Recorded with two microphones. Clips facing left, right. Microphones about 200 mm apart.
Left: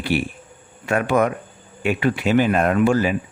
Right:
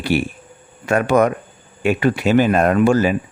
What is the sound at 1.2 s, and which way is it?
Speech, 40° right (ahead or behind).